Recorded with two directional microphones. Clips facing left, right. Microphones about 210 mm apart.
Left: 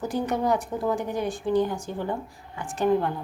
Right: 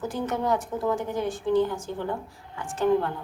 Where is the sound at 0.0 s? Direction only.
15° left (ahead or behind).